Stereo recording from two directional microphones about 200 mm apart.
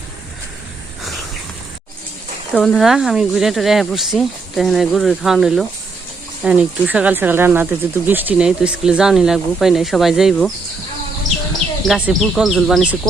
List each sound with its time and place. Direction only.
2.5 s speech: centre (ahead or behind)
11.9 s speech: 5° right (ahead or behind)